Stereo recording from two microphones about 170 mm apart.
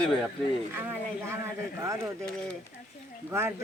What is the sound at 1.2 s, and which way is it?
Speech, 15° right (ahead or behind).